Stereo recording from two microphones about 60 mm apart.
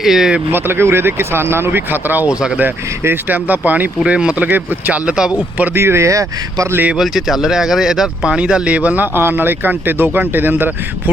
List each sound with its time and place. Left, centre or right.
0.0 s speech: centre
0.5 s speech: right
3.2 s speech: right
4.0 s speech: centre
5.0 s speech: centre
5.7 s speech: right
6.9 s speech: centre; by 9.0 s right
9.1 s speech: right